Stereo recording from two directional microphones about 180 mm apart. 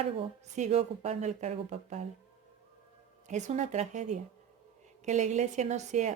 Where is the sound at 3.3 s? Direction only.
40° right (ahead or behind).